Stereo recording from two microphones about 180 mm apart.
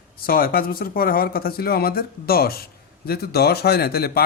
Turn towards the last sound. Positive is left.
turn(degrees=60)  # may be behind; listen again after turning